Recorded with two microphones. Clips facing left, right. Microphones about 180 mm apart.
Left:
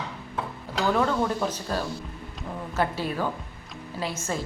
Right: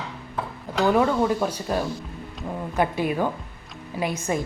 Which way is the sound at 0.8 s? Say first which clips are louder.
Right 4 dB; 10° right (ahead or behind).